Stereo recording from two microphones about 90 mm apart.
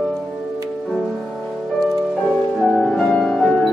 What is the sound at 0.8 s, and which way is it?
Music, 5° right (ahead or behind).